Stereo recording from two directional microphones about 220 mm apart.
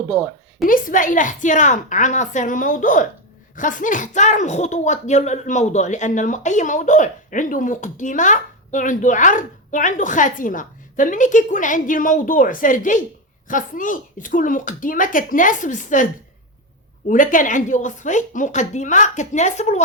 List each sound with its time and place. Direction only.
0.6 s speech: 40° left (ahead or behind)
17.1 s speech: 35° left (ahead or behind)